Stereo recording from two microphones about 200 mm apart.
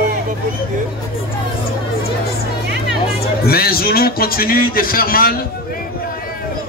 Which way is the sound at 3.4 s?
50° left (ahead or behind).